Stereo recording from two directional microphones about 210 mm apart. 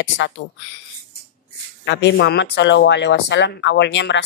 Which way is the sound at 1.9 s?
55° left (ahead or behind).